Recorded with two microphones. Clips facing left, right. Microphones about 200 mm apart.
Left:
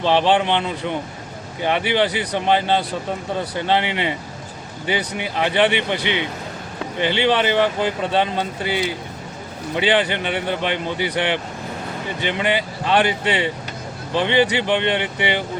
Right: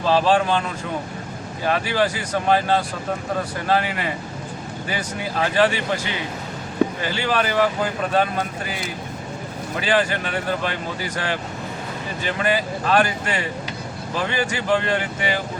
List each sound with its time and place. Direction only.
0.0 s speech: 25° left (ahead or behind)
1.6 s speech: 20° left (ahead or behind)
12.4 s speech: 25° left (ahead or behind)